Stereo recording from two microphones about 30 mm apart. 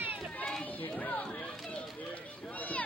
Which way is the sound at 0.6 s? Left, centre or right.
Left.